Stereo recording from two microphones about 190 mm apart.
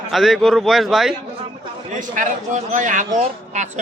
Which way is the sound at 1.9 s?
40° right (ahead or behind).